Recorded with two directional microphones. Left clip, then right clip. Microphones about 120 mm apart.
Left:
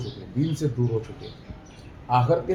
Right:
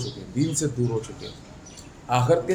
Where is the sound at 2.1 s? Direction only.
15° right (ahead or behind).